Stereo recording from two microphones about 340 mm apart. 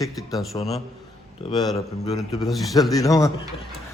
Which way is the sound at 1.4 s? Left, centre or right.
Centre.